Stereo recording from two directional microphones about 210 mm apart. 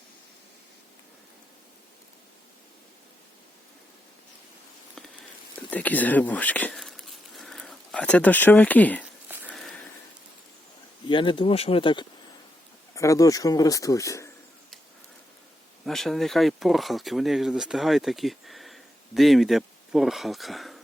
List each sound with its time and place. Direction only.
5.7 s speech: 10° left (ahead or behind)
9.5 s a sound: centre (ahead or behind)
11.1 s speech: 25° left (ahead or behind)
15.9 s speech: centre (ahead or behind)